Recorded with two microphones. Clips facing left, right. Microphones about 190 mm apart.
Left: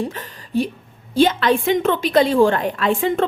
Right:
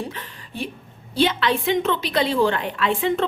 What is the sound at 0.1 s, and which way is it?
A woman's voice, 40° left (ahead or behind).